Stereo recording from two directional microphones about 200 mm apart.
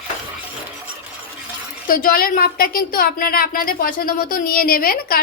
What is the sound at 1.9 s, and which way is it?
A woman's voice, 45° left (ahead or behind).